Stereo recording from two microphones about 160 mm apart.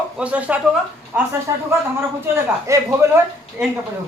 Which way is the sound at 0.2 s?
10° right (ahead or behind).